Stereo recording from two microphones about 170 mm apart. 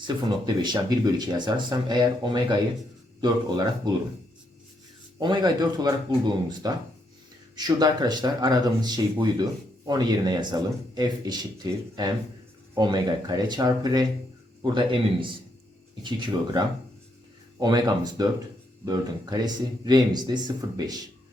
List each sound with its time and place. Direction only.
0.0 s speech: 25° right (ahead or behind)
5.2 s speech: 25° right (ahead or behind)